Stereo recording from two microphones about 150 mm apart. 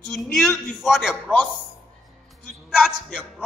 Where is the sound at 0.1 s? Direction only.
Centre (ahead or behind).